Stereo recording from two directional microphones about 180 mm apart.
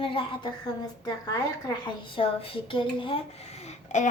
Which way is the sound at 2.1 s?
30° left (ahead or behind).